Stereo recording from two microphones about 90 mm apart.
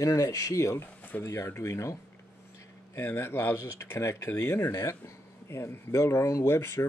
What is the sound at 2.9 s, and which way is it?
Speech, 25° left (ahead or behind).